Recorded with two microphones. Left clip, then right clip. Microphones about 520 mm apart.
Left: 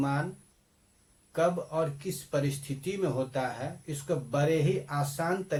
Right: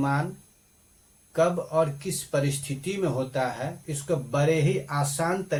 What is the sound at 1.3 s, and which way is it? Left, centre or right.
Speech, left.